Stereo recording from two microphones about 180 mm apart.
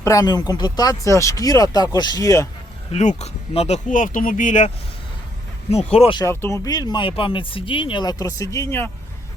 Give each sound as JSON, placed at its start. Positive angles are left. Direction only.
{"t": 0.0, "sound": "speech", "side_deg": 20}
{"t": 2.9, "sound": "speech", "side_deg": 40}
{"t": 5.9, "sound": "speech", "side_deg": 35}
{"t": 6.1, "sound": "speech", "side_deg": 15}